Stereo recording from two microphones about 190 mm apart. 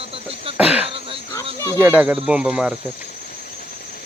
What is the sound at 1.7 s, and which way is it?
Speech, 10° right (ahead or behind).